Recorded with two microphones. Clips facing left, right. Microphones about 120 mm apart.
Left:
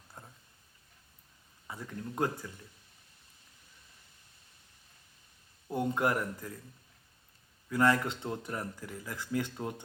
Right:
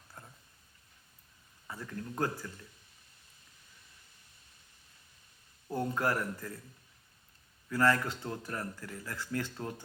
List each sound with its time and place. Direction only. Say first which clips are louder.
0.2 s a sound: left 1 dB; 10° left (ahead or behind)
1.6 s speech: even; 15° left (ahead or behind)
5.7 s a man's voice: left 2 dB; 20° left (ahead or behind)
7.7 s speech: left 1 dB; 20° left (ahead or behind)